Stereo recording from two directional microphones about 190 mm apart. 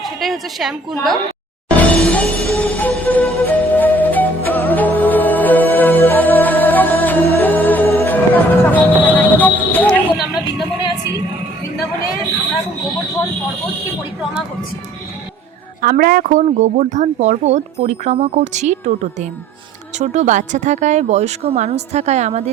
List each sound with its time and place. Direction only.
0.0 s a woman's voice: centre (ahead or behind)
1.7 s music: 5° left (ahead or behind)
15.8 s speech: 50° right (ahead or behind); by 22.4 s 35° right (ahead or behind)